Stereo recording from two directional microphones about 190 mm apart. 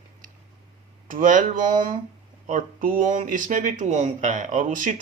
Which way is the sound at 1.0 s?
45° right (ahead or behind).